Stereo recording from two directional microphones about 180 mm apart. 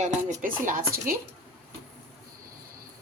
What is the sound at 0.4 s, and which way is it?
Chopping, 45° right (ahead or behind).